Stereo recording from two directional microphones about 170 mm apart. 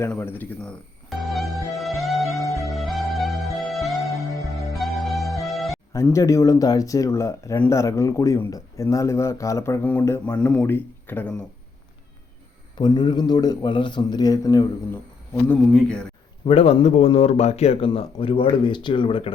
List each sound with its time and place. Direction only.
0.0 s speech: 10° left (ahead or behind)
1.1 s music: centre (ahead or behind)
5.9 s speech: 15° left (ahead or behind)
12.7 s a man's voice: 25° left (ahead or behind)
15.4 s speech: 5° left (ahead or behind)
16.5 s speech: 35° left (ahead or behind)